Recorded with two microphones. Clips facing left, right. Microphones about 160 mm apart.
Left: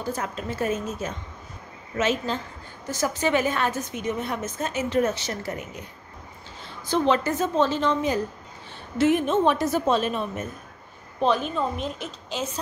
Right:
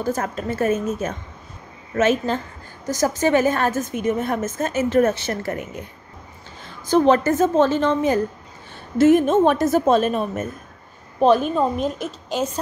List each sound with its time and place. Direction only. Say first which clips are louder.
0.0 s a woman's voice: right 6 dB; 45° right (ahead or behind)
6.9 s a woman's voice: right 6 dB; 45° right (ahead or behind)